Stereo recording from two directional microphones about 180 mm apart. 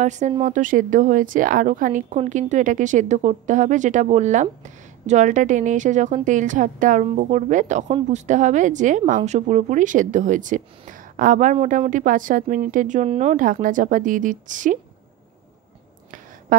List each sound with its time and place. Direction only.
0.0 s speech: 40° right (ahead or behind)